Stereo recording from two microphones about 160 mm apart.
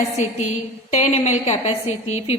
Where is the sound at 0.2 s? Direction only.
45° left (ahead or behind).